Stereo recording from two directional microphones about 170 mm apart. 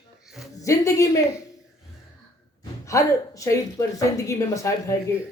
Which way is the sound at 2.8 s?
20° left (ahead or behind).